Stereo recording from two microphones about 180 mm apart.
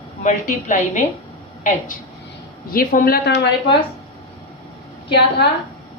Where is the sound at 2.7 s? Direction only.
55° left (ahead or behind).